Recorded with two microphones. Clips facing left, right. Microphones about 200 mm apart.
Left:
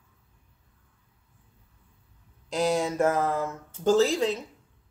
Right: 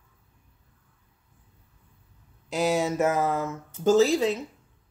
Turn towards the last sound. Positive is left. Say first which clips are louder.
# right 2 dB
turn(degrees=-5)  # may be behind; listen again after turning